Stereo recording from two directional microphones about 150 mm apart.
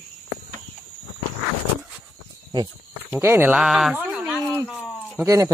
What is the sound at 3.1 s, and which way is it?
Speech, 15° right (ahead or behind).